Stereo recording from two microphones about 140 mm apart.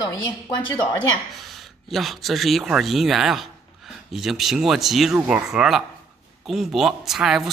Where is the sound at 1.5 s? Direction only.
Centre (ahead or behind).